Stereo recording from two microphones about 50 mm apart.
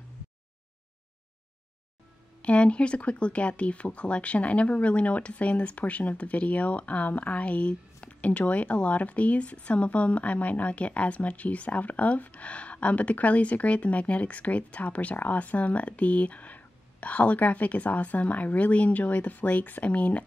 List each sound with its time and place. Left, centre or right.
2.4 s speech: left